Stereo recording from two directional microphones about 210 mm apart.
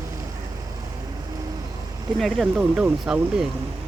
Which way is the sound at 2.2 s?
Centre (ahead or behind).